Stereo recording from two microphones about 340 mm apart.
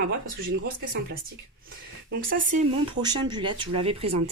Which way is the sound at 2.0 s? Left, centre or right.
Right.